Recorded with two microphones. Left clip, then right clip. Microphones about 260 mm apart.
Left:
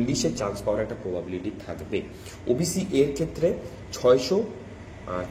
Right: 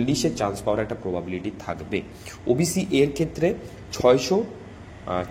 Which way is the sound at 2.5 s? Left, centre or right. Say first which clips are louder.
Right 3 dB; right.